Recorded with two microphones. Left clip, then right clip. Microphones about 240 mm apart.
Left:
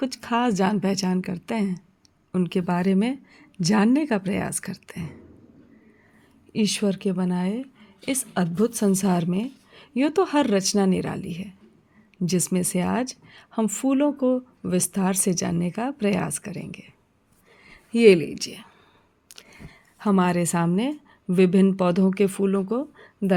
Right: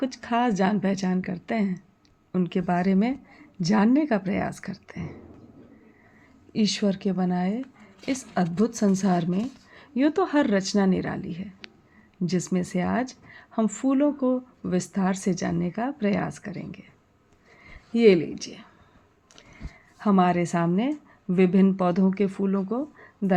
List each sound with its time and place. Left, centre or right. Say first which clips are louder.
0.0 s a woman's voice: left 1 dB; left
6.5 s a woman's voice: left 1 dB; left
19.3 s single-lens reflex camera: left 4 dB; left
20.0 s a woman's voice: right 1 dB; left